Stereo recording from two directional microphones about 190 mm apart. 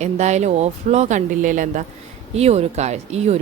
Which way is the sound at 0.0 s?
35° right (ahead or behind).